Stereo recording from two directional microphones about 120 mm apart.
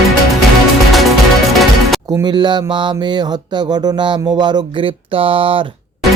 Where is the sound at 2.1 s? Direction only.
35° right (ahead or behind).